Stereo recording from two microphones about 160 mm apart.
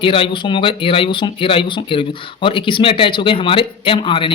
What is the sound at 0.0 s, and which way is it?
Speech, 35° left (ahead or behind).